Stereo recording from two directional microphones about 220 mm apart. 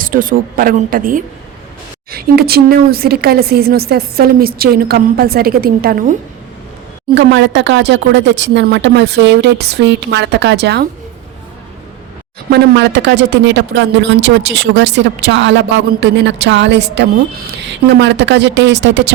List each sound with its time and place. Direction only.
0.0 s a woman's voice: 40° right (ahead or behind)
7.1 s speech: 55° right (ahead or behind)
12.5 s speech: 50° right (ahead or behind)